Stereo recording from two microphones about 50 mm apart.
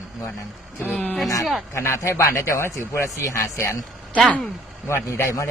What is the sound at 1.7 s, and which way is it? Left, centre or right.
A man's voice, left.